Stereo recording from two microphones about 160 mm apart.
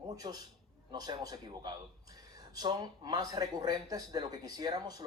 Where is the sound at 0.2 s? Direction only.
25° right (ahead or behind).